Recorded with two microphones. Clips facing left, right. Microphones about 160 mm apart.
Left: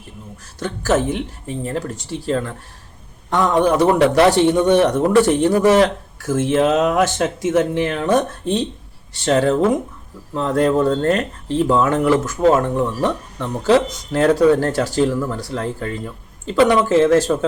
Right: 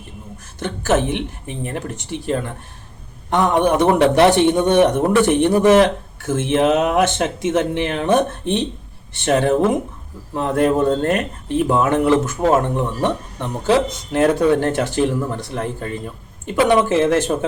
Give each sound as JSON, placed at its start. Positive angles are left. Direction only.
{"t": 0.6, "sound": "speech", "side_deg": -25}